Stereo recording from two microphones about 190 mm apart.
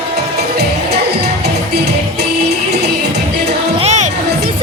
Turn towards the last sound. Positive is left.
turn(degrees=-35)  # may be behind; listen again after turning